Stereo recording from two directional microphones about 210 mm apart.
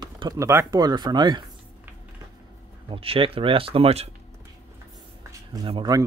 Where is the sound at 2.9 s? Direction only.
25° right (ahead or behind).